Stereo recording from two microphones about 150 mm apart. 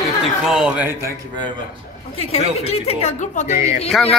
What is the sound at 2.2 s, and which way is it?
A woman's voice, 40° left (ahead or behind).